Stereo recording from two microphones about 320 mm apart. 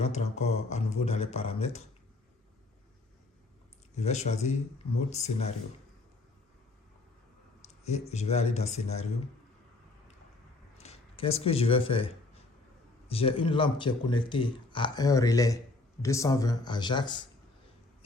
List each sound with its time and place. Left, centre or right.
0.0 s speech: left
3.9 s speech: left
8.0 s speech: left
10.8 s a sound: centre
13.1 s speech: centre